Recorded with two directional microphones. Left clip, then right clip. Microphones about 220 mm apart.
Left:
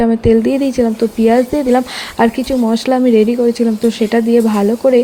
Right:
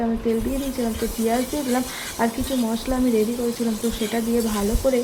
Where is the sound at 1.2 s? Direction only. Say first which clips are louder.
Left 12 dB; 40° left (ahead or behind).